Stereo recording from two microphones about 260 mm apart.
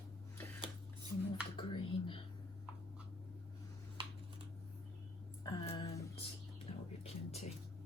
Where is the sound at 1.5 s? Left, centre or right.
Centre.